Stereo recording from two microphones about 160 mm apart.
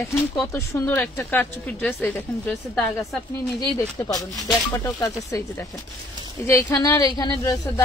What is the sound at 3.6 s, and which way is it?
Speech, 25° left (ahead or behind).